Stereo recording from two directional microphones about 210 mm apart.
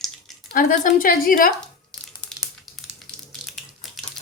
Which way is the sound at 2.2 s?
5° left (ahead or behind).